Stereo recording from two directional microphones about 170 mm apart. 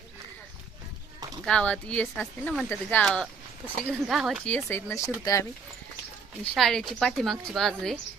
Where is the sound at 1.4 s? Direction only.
5° left (ahead or behind).